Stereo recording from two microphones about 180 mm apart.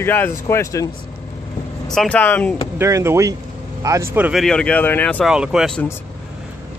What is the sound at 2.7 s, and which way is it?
Speech, 15° right (ahead or behind).